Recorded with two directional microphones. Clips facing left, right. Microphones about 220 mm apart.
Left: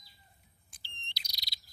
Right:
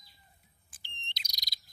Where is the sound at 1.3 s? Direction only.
45° right (ahead or behind).